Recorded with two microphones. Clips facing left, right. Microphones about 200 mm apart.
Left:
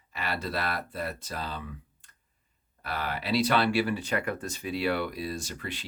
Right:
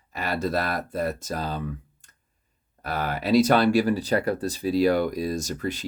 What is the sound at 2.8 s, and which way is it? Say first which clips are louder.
Speech: right 6 dB; 45° right (ahead or behind).